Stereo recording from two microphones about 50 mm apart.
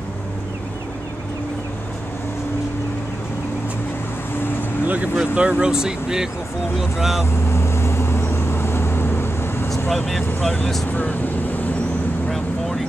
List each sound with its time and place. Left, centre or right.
4.8 s vehicle: right
5.1 s speech: right
7.2 s vehicle: left
9.8 s speech: centre
10.9 s speech: left
12.3 s vehicle: centre